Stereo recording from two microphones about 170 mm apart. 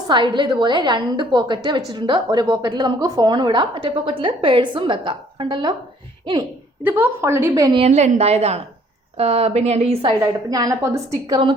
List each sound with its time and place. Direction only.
0.1 s a woman's voice: 25° right (ahead or behind)
6.8 s a woman's voice: 10° right (ahead or behind)
7.8 s a woman's voice: 40° right (ahead or behind)
10.2 s a woman's voice: 20° right (ahead or behind)